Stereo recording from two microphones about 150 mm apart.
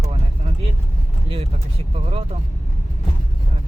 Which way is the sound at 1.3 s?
40° right (ahead or behind).